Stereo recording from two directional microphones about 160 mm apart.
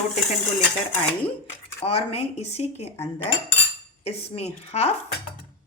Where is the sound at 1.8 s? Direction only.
40° left (ahead or behind).